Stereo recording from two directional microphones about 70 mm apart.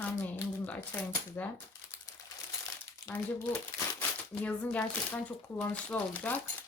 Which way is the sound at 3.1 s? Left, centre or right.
Left.